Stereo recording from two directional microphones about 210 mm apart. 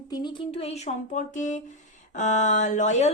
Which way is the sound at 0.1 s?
20° left (ahead or behind).